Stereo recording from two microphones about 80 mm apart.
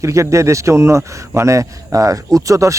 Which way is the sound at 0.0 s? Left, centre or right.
Right.